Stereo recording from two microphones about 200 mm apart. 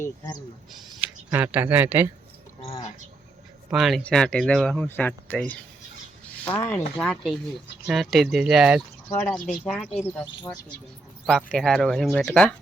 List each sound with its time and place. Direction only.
0.0 s speech: 20° left (ahead or behind)
0.7 s speech: centre (ahead or behind)
2.6 s speech: 30° left (ahead or behind)
3.7 s speech: centre (ahead or behind)
9.0 s speech: 10° left (ahead or behind)
11.3 s speech: centre (ahead or behind)